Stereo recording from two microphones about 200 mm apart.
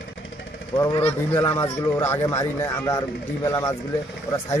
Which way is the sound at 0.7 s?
20° left (ahead or behind).